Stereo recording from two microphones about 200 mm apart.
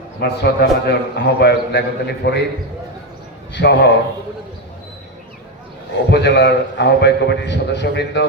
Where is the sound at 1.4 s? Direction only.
55° left (ahead or behind).